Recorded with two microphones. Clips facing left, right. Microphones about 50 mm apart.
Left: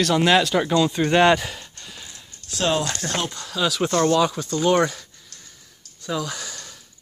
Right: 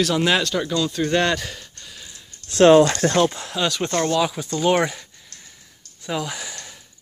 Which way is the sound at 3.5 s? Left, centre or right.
Centre.